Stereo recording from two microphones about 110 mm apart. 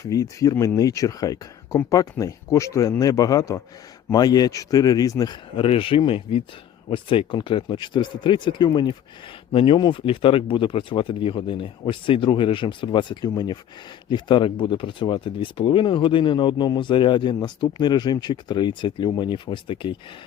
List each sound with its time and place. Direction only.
0.0 s a man's voice: 30° left (ahead or behind)
5.5 s speech: 55° left (ahead or behind)